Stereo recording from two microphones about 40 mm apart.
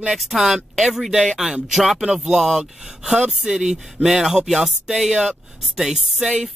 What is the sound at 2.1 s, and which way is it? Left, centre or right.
Speech, centre.